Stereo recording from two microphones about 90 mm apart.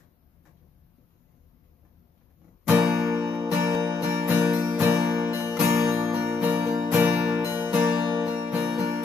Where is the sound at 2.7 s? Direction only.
25° right (ahead or behind).